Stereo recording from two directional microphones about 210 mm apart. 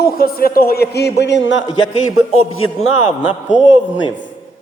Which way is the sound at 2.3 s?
85° left.